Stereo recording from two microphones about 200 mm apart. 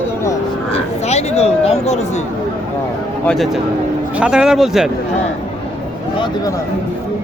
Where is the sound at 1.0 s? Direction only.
30° left (ahead or behind).